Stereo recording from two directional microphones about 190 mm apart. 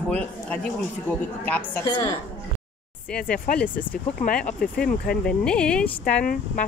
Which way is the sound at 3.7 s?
45° left (ahead or behind).